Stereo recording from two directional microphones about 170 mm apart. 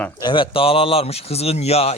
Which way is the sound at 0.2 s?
25° left (ahead or behind).